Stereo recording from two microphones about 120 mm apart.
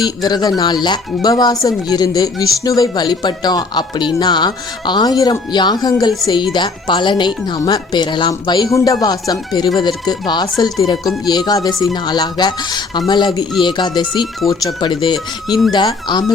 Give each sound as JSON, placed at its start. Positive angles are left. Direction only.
{"t": 0.0, "sound": "speech", "side_deg": 35}